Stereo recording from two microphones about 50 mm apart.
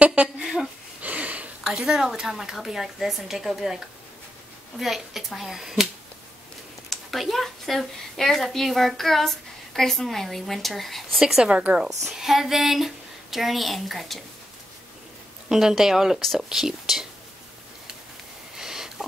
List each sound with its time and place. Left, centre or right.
0.0 s a sound: right
1.0 s sniff: right
1.6 s a woman's voice: centre
6.9 s a woman's voice: centre
11.1 s a woman's voice: centre
11.5 s speech: right
12.0 s a woman's voice: centre
15.4 s a woman's voice: centre
18.6 s sniff: centre